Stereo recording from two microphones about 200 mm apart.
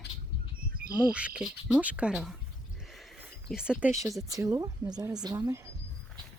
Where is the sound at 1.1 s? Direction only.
5° right (ahead or behind).